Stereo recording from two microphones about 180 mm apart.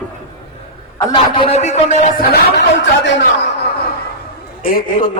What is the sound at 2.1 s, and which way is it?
Speech, 60° left (ahead or behind).